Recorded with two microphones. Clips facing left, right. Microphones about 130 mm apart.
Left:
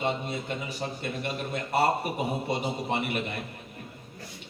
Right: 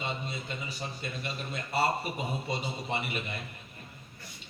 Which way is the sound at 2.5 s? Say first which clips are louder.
Left 5 dB; 60° left (ahead or behind).